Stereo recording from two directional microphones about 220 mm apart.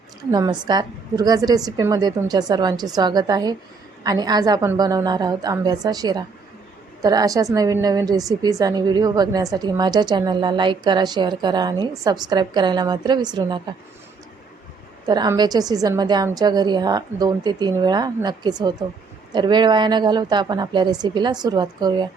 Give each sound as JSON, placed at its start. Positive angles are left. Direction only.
{"t": 0.2, "sound": "a woman's voice", "side_deg": -15}
{"t": 15.0, "sound": "a woman's voice", "side_deg": -20}